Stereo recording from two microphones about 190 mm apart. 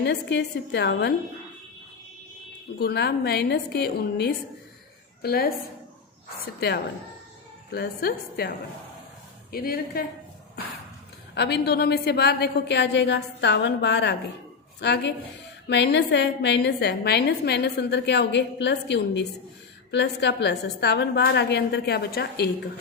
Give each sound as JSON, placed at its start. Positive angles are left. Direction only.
{"t": 0.0, "sound": "a woman's voice", "side_deg": 65}
{"t": 2.7, "sound": "a woman's voice", "side_deg": 55}
{"t": 6.6, "sound": "a woman's voice", "side_deg": 55}
{"t": 11.3, "sound": "a woman's voice", "side_deg": 60}